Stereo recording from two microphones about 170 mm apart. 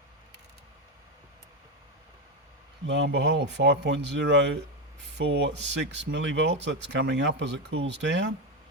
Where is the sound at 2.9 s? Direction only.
90° right.